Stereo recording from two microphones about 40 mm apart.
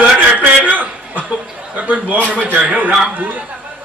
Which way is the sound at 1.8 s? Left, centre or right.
Right.